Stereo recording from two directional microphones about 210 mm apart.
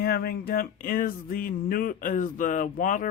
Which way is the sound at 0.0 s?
45° left (ahead or behind).